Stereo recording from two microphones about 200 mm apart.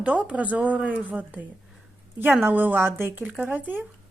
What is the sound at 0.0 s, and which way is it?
Speech, 5° right (ahead or behind).